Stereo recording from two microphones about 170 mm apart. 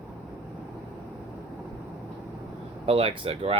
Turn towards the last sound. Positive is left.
turn(degrees=-35)  # may be behind; listen again after turning